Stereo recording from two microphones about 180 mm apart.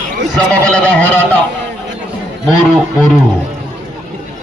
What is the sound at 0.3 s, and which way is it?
Speech, 5° left (ahead or behind).